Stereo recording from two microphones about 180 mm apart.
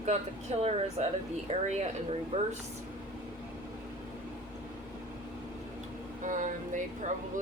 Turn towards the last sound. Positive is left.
turn(degrees=-45)  # may be behind; listen again after turning